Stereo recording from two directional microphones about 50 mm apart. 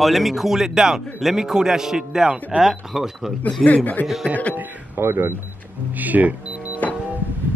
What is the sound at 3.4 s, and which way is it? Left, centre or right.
Speech, left.